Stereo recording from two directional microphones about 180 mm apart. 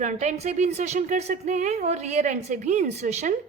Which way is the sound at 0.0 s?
40° right (ahead or behind).